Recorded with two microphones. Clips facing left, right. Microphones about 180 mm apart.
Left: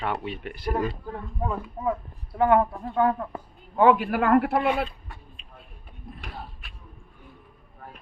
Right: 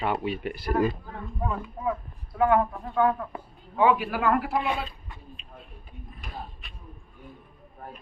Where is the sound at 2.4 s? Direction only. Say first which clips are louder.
Left 2 dB; 25° left (ahead or behind); by 4.9 s 60° left (ahead or behind).